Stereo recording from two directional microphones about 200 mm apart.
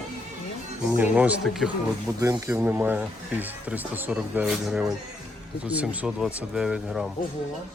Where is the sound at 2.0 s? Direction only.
15° right (ahead or behind).